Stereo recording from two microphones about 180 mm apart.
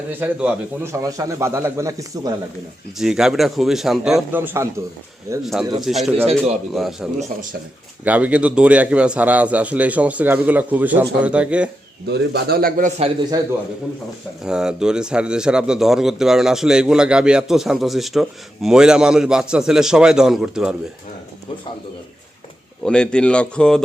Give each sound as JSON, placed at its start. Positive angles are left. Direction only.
{"t": 0.1, "sound": "a man's voice", "side_deg": -10}
{"t": 3.0, "sound": "a man's voice", "side_deg": -5}
{"t": 5.4, "sound": "a man's voice", "side_deg": 0}
{"t": 12.1, "sound": "a man's voice", "side_deg": -60}
{"t": 13.3, "sound": "a man's voice", "side_deg": -20}
{"t": 14.4, "sound": "a man's voice", "side_deg": -5}
{"t": 22.8, "sound": "a man's voice", "side_deg": 5}